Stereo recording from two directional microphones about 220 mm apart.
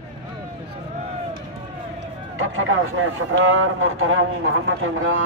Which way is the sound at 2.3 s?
65° right (ahead or behind).